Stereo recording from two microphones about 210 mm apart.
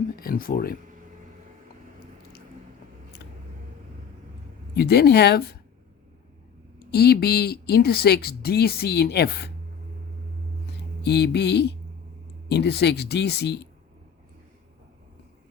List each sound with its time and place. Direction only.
0.2 s a woman's voice: 45° left (ahead or behind)
4.7 s a woman's voice: 50° left (ahead or behind)
6.7 s a woman's voice: 50° left (ahead or behind)
11.0 s a woman's voice: 50° left (ahead or behind)